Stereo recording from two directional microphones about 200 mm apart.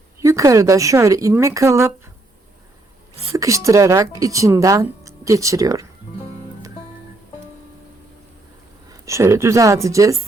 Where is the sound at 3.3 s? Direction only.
15° right (ahead or behind).